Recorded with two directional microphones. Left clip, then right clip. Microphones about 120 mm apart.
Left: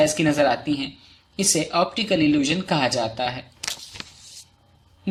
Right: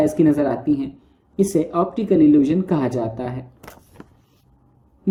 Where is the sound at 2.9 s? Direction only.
35° left (ahead or behind).